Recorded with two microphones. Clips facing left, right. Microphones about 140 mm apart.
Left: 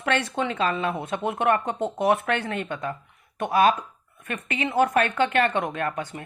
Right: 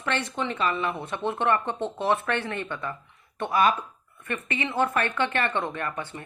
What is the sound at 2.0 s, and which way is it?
Speech, 65° left (ahead or behind).